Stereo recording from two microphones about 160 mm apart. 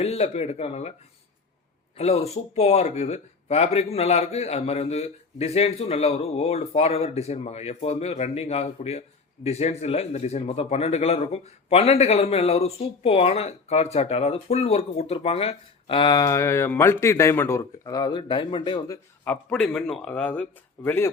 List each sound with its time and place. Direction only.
0.0 s speech: 40° left (ahead or behind)
2.0 s speech: 40° left (ahead or behind)
19.2 s speech: 5° left (ahead or behind)